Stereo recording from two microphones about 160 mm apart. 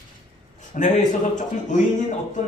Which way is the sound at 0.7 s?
50° left (ahead or behind).